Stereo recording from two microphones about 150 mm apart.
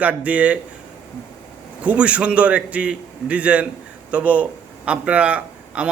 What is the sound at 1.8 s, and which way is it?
A man's voice, 10° right (ahead or behind).